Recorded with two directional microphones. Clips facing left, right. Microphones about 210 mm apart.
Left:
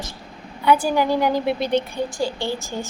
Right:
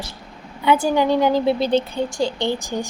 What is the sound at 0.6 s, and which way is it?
A woman's voice, 20° right (ahead or behind).